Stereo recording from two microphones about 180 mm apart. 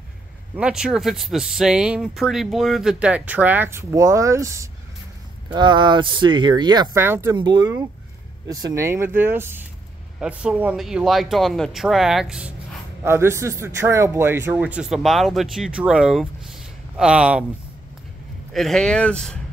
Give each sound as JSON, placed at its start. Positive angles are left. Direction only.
{"t": 0.6, "sound": "a man's voice", "side_deg": -5}
{"t": 7.3, "sound": "a man's voice", "side_deg": -25}
{"t": 18.5, "sound": "a man's voice", "side_deg": 0}